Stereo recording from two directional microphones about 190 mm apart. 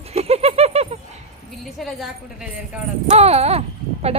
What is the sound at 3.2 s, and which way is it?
Speech, 35° right (ahead or behind).